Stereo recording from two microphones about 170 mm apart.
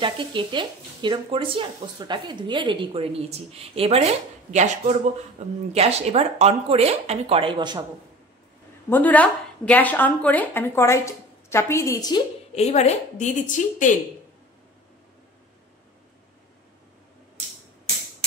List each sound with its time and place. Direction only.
0.0 s speech: 30° right (ahead or behind)
8.9 s a woman's voice: 10° left (ahead or behind)
12.5 s a woman's voice: 40° left (ahead or behind)